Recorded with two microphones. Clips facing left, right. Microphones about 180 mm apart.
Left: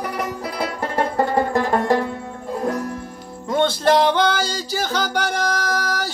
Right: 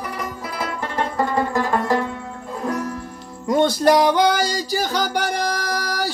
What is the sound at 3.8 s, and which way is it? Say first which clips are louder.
Music: right 1 dB; 10° right (ahead or behind).